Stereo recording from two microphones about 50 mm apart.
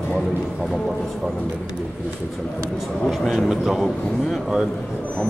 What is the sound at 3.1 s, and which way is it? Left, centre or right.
Speech, centre.